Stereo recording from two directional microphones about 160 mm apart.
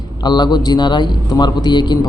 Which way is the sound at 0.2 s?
25° left (ahead or behind).